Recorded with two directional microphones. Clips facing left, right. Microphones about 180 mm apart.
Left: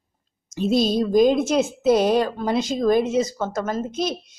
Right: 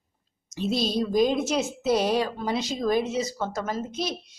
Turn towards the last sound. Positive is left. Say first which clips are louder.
# left 5 dB
turn(degrees=50)  # may be behind; listen again after turning